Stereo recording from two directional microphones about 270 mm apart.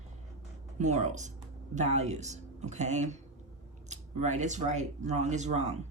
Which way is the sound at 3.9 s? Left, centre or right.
Right.